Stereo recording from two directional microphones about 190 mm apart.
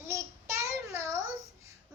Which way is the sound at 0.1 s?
15° right (ahead or behind).